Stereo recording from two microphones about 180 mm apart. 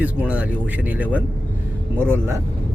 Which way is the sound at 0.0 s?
5° right (ahead or behind).